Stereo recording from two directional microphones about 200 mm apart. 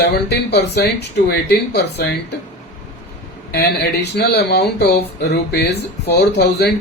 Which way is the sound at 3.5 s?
55° left (ahead or behind).